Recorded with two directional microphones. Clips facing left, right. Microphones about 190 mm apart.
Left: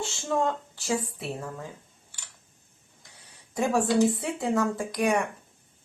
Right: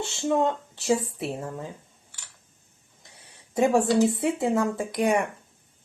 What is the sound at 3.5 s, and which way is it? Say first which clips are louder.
A woman's voice: right 3 dB; 25° right (ahead or behind).